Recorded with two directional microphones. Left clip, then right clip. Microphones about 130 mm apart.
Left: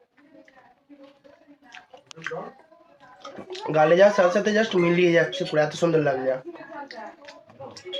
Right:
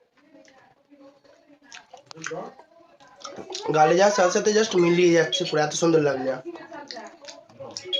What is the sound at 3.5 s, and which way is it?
Speech, 20° right (ahead or behind).